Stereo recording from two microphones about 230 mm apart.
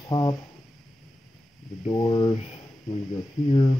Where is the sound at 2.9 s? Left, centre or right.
Centre.